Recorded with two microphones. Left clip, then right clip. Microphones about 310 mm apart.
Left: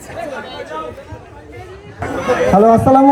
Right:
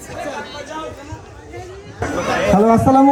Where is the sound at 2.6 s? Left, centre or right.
Centre.